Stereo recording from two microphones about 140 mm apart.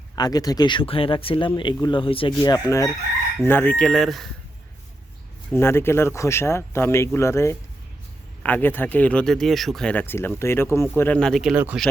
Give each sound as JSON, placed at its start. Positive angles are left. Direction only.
{"t": 0.2, "sound": "speech", "side_deg": 25}
{"t": 2.4, "sound": "chicken", "side_deg": 25}
{"t": 3.4, "sound": "speech", "side_deg": 15}
{"t": 5.5, "sound": "speech", "side_deg": 15}
{"t": 11.5, "sound": "speech", "side_deg": -10}